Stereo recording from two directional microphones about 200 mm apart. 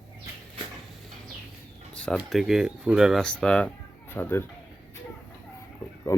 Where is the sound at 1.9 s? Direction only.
5° left (ahead or behind).